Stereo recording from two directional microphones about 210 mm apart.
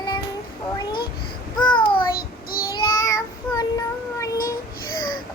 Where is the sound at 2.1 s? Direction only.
45° left (ahead or behind).